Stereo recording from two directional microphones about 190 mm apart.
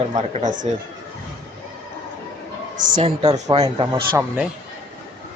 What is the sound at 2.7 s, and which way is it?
Speech, 40° right (ahead or behind).